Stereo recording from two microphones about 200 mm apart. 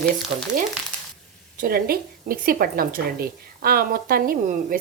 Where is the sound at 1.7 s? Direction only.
45° right (ahead or behind).